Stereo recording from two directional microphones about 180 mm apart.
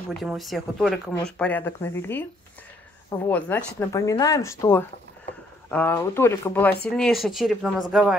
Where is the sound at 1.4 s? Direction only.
10° left (ahead or behind).